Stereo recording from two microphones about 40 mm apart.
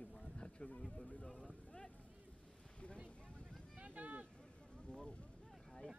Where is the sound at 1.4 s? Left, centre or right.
Left.